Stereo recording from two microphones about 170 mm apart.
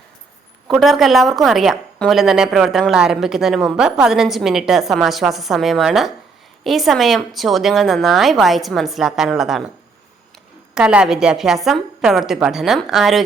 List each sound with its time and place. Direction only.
0.7 s a woman's voice: centre (ahead or behind)
10.8 s a woman's voice: 5° right (ahead or behind)